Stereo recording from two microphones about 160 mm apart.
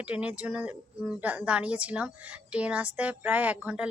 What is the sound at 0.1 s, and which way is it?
A woman's voice, 10° right (ahead or behind).